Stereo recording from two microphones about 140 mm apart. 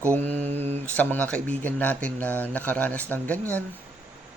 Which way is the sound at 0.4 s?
50° right (ahead or behind).